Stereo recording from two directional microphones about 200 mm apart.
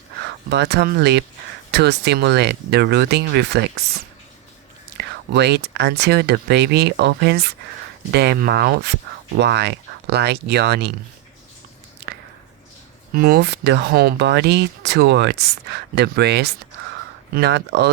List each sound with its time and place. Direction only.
0.5 s speech: 55° right (ahead or behind)
4.9 s speech: 55° right (ahead or behind)
12.1 s squish: 55° right (ahead or behind)
13.1 s speech: 50° right (ahead or behind)